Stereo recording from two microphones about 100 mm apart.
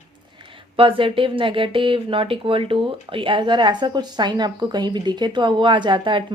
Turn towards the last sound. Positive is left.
turn(degrees=-55)  # may be behind; listen again after turning